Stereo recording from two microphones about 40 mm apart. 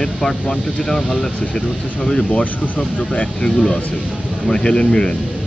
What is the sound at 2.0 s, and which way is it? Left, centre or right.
Speech, left.